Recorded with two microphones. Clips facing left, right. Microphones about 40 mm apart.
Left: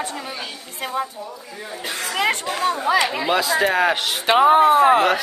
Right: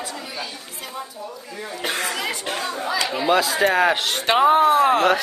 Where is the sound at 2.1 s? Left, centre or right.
Left.